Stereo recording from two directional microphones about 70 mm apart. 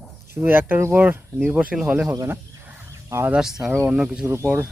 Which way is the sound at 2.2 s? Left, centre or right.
Right.